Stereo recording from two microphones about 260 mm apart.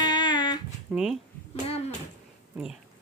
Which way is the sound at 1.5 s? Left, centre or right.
Left.